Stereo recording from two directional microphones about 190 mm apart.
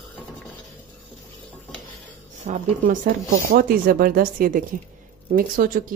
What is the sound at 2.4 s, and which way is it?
Speech, 45° right (ahead or behind).